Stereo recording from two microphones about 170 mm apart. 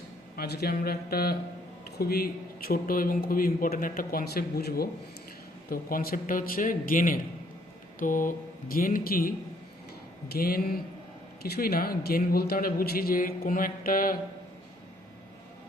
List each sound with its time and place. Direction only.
0.3 s speech: 70° left (ahead or behind)
10.3 s speech: 60° left (ahead or behind)